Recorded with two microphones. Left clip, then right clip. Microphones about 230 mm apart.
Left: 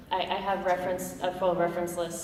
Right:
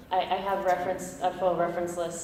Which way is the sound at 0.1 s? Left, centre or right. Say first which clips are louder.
Right 2 dB; left.